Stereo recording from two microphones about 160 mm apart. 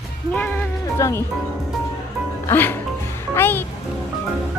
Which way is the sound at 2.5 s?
15° left (ahead or behind).